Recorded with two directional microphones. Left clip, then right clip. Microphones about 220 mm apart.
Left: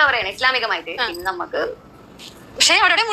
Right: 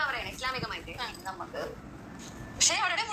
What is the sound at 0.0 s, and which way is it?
A woman's voice, 40° left (ahead or behind).